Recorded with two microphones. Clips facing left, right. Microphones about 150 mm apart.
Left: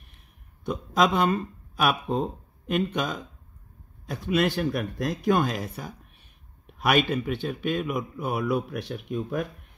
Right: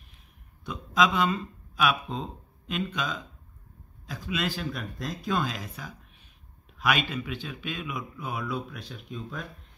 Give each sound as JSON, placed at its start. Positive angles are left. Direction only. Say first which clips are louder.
{"t": 0.7, "sound": "a man's voice", "louder": "left 2 dB", "side_deg": 55}